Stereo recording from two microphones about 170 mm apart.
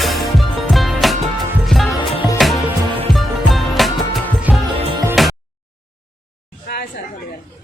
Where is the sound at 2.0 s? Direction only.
30° left (ahead or behind).